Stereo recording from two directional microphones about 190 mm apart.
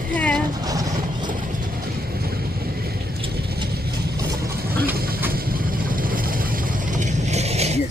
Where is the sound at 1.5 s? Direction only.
45° right (ahead or behind).